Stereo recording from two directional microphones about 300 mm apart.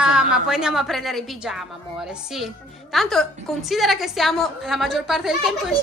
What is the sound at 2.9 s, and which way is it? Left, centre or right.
A woman's voice, centre.